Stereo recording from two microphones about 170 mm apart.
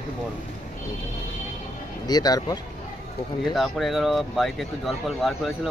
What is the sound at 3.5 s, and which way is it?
Speech, centre (ahead or behind).